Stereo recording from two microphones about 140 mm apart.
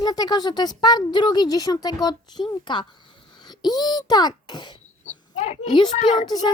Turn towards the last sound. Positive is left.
turn(degrees=30)  # may be behind; listen again after turning